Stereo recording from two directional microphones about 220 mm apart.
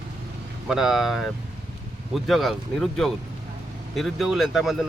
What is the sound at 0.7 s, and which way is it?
Speech, centre (ahead or behind).